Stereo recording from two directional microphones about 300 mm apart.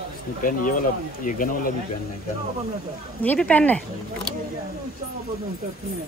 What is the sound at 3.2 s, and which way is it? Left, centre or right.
Speech, centre.